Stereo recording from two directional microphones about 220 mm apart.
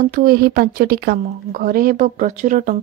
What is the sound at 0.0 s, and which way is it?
Speech, 40° right (ahead or behind).